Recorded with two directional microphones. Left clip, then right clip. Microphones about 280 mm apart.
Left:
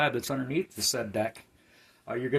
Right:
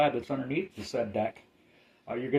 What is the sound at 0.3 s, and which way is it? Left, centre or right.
Speech, left.